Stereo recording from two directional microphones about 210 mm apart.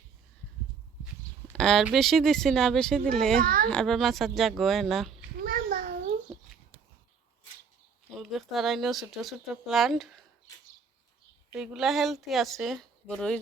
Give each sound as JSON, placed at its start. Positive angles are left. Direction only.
{"t": 1.5, "sound": "speech", "side_deg": 0}
{"t": 3.4, "sound": "a child's voice", "side_deg": -40}
{"t": 3.7, "sound": "speech", "side_deg": 5}
{"t": 5.4, "sound": "a sound", "side_deg": -40}
{"t": 8.2, "sound": "speech", "side_deg": 0}
{"t": 11.5, "sound": "speech", "side_deg": 0}